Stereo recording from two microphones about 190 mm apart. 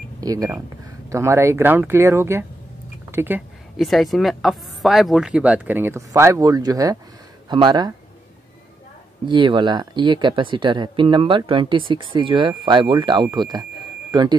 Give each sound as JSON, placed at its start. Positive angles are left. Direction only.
{"t": 0.2, "sound": "a woman's voice", "side_deg": -20}
{"t": 9.3, "sound": "speech", "side_deg": -25}